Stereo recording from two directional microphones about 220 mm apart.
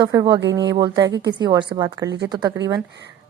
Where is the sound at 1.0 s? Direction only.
50° right (ahead or behind).